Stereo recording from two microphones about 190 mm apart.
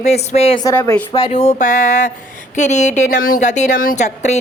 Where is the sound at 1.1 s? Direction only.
25° left (ahead or behind).